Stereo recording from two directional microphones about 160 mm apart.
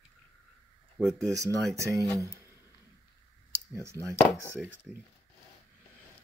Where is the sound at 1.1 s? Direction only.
20° right (ahead or behind).